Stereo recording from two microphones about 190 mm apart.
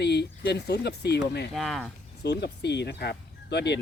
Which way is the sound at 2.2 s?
60° left (ahead or behind).